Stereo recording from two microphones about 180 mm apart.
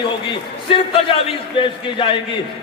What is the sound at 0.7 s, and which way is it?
A man's voice, 30° left (ahead or behind).